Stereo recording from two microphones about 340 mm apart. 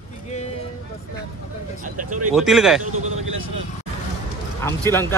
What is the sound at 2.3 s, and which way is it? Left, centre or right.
Speech, centre.